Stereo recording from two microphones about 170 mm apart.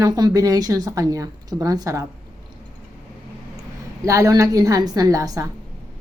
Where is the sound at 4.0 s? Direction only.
20° right (ahead or behind).